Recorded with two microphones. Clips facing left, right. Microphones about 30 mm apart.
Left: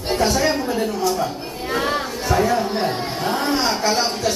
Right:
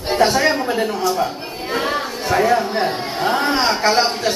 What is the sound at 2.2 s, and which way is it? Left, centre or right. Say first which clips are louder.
Speech: right 3 dB; centre.